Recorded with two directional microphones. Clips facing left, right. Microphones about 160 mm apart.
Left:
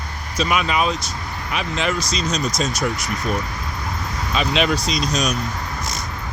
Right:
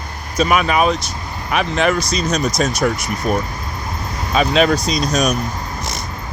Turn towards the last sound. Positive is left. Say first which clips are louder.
# right 4 dB
turn(degrees=-50)  # may be behind; listen again after turning